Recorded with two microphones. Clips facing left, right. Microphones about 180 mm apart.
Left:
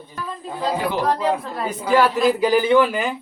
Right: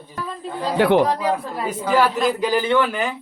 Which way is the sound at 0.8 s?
70° right (ahead or behind).